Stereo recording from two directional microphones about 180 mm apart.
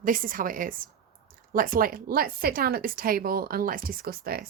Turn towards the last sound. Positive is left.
turn(degrees=-55)  # may be behind; listen again after turning